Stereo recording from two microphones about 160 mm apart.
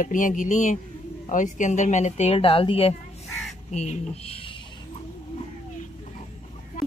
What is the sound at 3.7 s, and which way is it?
Speech, 45° left (ahead or behind).